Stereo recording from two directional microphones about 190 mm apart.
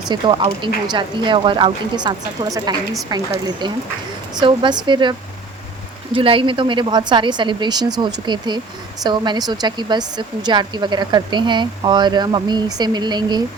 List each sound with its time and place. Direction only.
0.1 s a woman's voice: 25° right (ahead or behind)
6.1 s a woman's voice: 25° right (ahead or behind)